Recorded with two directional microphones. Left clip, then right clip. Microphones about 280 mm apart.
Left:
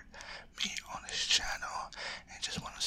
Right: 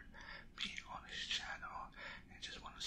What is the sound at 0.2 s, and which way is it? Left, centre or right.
Whispering, centre.